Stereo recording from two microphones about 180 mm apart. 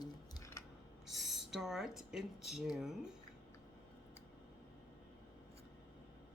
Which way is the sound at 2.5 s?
Centre (ahead or behind).